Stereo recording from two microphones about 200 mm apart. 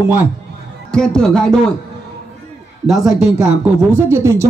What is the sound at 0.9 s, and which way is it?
Speech, 5° left (ahead or behind).